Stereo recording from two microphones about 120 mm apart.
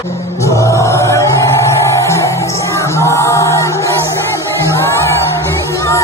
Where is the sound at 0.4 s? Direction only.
25° left (ahead or behind).